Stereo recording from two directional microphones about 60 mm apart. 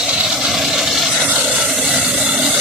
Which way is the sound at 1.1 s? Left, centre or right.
Centre.